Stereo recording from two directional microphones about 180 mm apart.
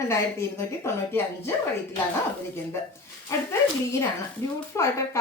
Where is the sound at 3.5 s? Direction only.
15° left (ahead or behind).